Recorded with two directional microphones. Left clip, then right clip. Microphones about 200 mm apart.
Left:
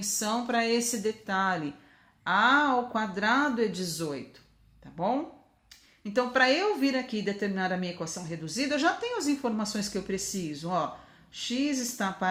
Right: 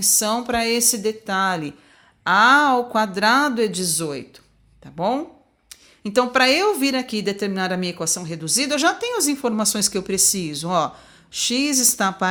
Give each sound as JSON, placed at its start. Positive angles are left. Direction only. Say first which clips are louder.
{"t": 0.0, "sound": "a woman's voice", "louder": "right 9 dB", "side_deg": -35}